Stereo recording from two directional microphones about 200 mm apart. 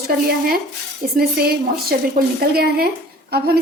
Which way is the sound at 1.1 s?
50° right (ahead or behind).